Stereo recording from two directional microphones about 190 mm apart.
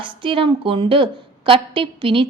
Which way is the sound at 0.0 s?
25° right (ahead or behind).